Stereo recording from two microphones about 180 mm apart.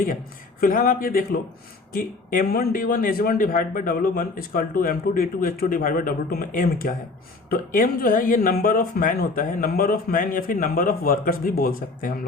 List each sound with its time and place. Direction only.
0.6 s a man's voice: 50° left (ahead or behind)